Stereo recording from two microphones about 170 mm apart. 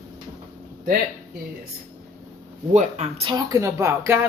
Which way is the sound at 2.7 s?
40° right (ahead or behind).